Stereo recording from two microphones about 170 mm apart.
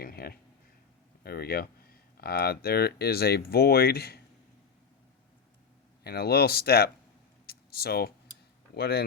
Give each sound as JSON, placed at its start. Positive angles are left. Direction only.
{"t": 0.0, "sound": "speech", "side_deg": 65}
{"t": 6.0, "sound": "speech", "side_deg": 65}
{"t": 7.4, "sound": "a sound", "side_deg": 65}
{"t": 8.7, "sound": "speech", "side_deg": 65}